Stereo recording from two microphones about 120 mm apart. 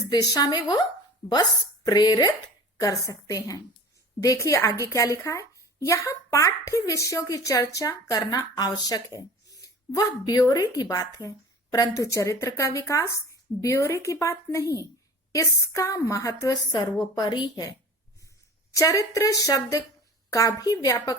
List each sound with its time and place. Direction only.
0.1 s speech: 30° left (ahead or behind)